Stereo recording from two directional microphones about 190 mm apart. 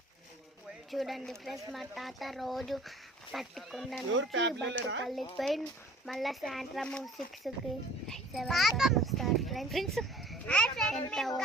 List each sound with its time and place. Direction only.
0.9 s speech: centre (ahead or behind)
4.1 s speech: 80° right
5.4 s a child's voice: centre (ahead or behind)